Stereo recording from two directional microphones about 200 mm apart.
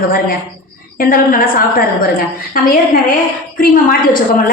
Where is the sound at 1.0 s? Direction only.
45° left (ahead or behind).